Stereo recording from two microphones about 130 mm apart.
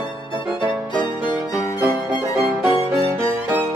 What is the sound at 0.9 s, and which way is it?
Music, 35° left (ahead or behind).